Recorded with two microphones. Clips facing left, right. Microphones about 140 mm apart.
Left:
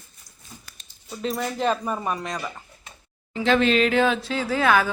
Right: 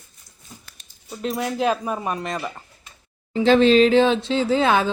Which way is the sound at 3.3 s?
30° right (ahead or behind).